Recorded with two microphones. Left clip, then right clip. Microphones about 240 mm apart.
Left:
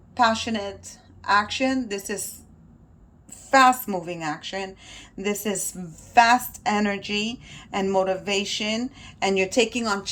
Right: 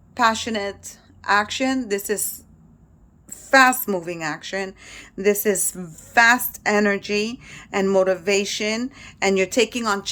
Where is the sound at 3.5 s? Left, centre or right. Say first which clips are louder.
Right 2 dB; centre.